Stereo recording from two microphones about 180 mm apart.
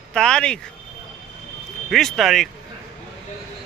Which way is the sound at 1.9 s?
Centre (ahead or behind).